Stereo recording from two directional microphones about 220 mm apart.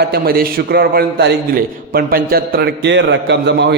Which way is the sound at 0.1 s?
45° right (ahead or behind).